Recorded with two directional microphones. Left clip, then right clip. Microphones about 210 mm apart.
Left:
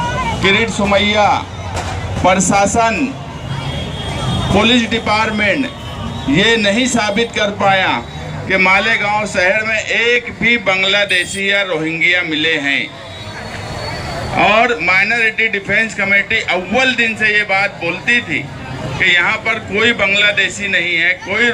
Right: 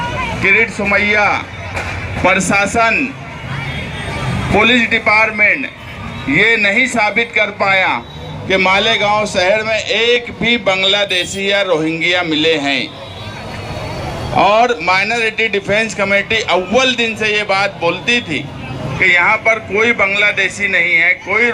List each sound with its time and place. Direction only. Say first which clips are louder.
0.9 s speech: left 2 dB; 5° right (ahead or behind)
4.7 s a man's voice: right 3 dB; 15° right (ahead or behind)
14.3 s a man's voice: right 1 dB; 20° right (ahead or behind)